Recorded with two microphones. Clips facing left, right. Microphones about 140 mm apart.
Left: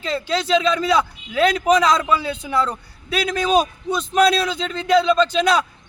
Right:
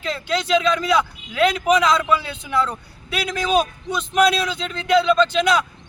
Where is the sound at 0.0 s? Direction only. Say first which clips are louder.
Left 1 dB; 30° left (ahead or behind).